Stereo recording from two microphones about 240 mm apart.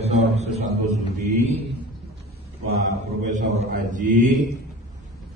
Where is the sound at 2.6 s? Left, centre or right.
Right.